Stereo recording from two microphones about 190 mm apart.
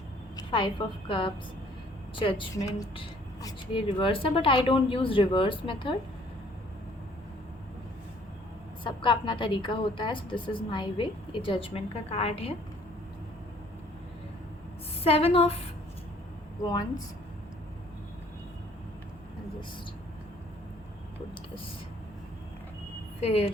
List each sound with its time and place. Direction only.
0.3 s a woman's voice: 25° left (ahead or behind)
8.8 s speech: 25° left (ahead or behind)
15.0 s a woman's voice: 30° left (ahead or behind)
23.2 s a woman's voice: 35° left (ahead or behind)